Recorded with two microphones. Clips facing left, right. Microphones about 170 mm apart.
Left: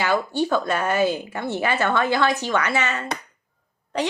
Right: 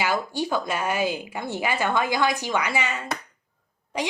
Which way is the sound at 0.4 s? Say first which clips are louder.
Left 4 dB; 10° right (ahead or behind).